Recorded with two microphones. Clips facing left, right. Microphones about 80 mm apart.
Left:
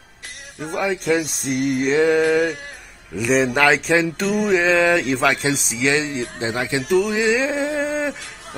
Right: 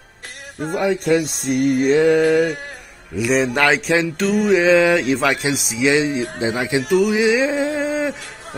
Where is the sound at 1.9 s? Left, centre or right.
Centre.